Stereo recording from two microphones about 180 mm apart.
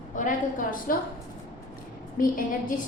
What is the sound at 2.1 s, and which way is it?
Speech, 50° left (ahead or behind).